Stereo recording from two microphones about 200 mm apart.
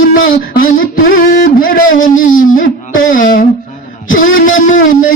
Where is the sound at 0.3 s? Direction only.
45° left (ahead or behind).